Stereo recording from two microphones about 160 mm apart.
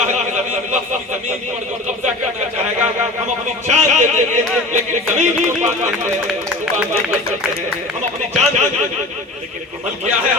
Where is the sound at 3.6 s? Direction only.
45° right (ahead or behind).